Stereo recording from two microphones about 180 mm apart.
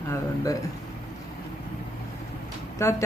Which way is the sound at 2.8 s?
15° left (ahead or behind).